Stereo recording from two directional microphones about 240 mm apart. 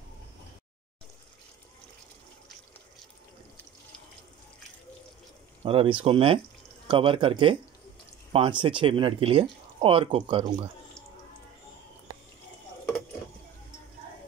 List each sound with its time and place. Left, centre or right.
5.6 s speech: right